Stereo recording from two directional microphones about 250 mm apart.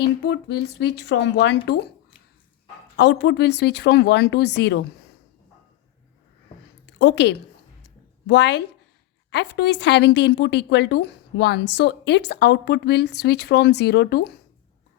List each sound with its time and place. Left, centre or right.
0.0 s a woman's voice: left
3.0 s a woman's voice: left
6.8 s a woman's voice: left